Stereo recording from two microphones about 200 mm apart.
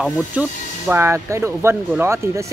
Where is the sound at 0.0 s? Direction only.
5° right (ahead or behind).